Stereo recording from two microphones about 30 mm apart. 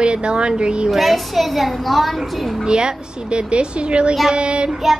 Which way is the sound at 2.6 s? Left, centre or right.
Right.